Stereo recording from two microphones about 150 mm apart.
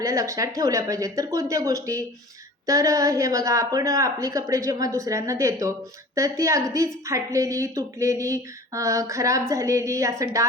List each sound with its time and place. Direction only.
0.0 s a woman's voice: 20° right (ahead or behind)